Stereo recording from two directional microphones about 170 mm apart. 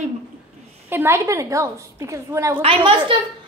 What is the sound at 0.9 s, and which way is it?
A woman's voice, 15° right (ahead or behind).